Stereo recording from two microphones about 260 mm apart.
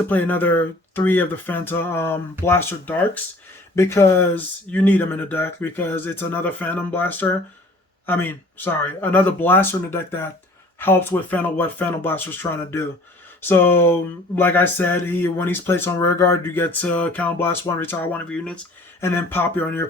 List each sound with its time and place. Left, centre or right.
0.1 s speech: centre